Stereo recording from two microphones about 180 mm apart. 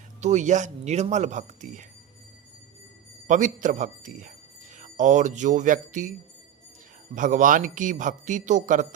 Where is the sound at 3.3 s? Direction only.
45° right (ahead or behind).